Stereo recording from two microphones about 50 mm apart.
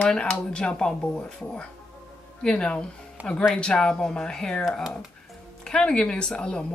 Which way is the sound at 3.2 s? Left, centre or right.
Right.